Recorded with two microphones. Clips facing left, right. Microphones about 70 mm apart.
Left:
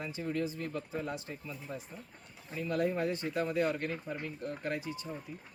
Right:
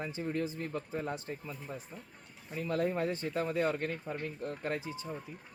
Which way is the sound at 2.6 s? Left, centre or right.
Right.